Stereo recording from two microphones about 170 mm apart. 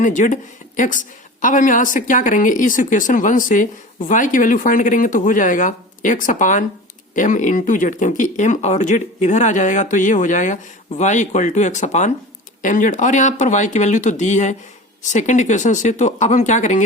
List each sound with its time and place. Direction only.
0.0 s a woman's voice: 50° left (ahead or behind)